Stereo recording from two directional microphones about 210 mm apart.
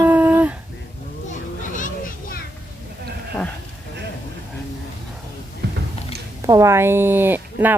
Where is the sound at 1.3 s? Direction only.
40° left (ahead or behind).